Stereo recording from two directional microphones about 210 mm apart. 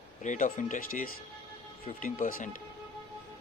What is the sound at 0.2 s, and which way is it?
Speech, 35° left (ahead or behind).